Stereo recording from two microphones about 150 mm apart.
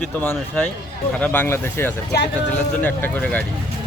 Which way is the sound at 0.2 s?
10° left (ahead or behind).